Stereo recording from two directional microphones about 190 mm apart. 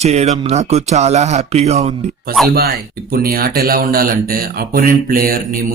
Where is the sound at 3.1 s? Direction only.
50° right (ahead or behind).